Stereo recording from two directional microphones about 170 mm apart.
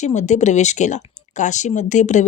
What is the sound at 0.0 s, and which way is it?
Speech, 45° left (ahead or behind).